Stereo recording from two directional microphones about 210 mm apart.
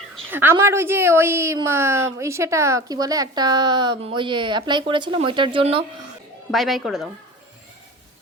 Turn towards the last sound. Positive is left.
turn(degrees=0)  # may be behind; listen again after turning